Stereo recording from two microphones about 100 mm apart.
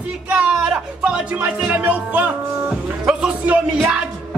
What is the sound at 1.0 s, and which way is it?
Music, 10° right (ahead or behind).